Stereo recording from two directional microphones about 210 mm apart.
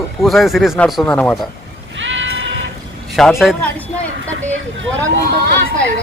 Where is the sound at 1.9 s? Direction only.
65° right (ahead or behind).